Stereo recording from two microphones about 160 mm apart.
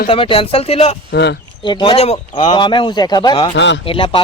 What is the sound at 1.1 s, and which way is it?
Speech, 90° left.